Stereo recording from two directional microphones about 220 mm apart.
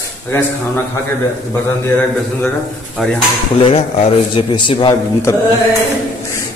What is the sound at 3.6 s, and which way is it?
A man's voice, 25° left (ahead or behind).